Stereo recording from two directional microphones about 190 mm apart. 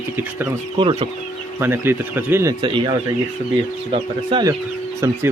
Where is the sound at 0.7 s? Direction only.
25° right (ahead or behind).